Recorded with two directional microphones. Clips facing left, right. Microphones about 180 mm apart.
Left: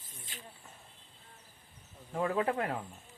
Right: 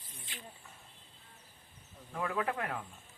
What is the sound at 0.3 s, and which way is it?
Vehicle, 45° left (ahead or behind).